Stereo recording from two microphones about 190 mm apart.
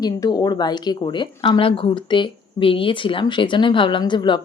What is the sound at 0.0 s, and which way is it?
A woman's voice, 20° left (ahead or behind).